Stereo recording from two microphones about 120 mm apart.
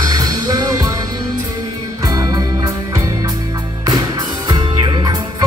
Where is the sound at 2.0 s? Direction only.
30° right (ahead or behind).